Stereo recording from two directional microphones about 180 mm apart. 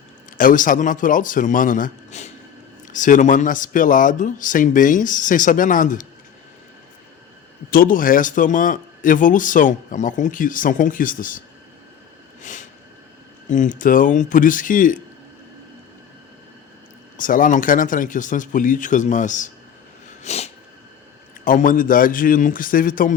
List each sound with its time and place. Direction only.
0.3 s speech: 50° left (ahead or behind)
7.7 s speech: 50° left (ahead or behind)
12.4 s snort: 45° left (ahead or behind)
13.5 s speech: 45° left (ahead or behind)
17.2 s speech: 50° left (ahead or behind)
20.2 s a sound: 35° left (ahead or behind)
21.4 s speech: 50° left (ahead or behind)